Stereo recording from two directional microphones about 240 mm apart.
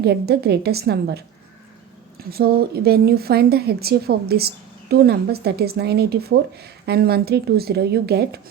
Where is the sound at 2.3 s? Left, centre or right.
Right.